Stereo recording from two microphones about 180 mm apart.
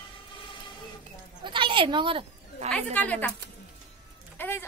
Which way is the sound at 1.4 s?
30° right (ahead or behind).